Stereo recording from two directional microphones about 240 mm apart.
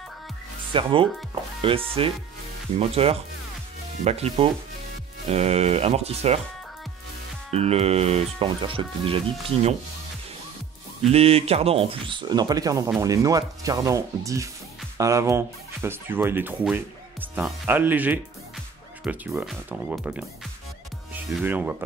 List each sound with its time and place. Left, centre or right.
0.7 s speech: right
7.5 s speech: right
11.1 s speech: right; by 21.7 s centre